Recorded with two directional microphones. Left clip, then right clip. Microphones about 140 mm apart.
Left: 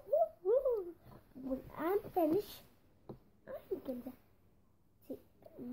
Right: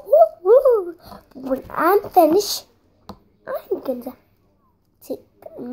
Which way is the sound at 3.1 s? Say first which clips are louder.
Right 19 dB; 35° right (ahead or behind).